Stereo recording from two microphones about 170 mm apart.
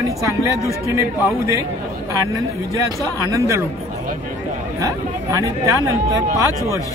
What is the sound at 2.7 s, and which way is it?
Speech, 20° right (ahead or behind).